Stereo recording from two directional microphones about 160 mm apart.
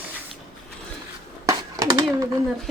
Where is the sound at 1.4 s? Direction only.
25° right (ahead or behind).